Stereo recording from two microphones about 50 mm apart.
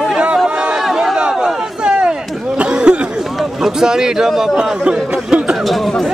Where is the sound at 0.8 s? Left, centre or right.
Centre.